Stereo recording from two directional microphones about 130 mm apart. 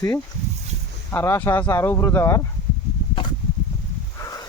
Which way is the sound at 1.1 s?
20° left (ahead or behind).